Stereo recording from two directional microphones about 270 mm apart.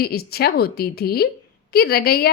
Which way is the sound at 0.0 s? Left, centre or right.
Left.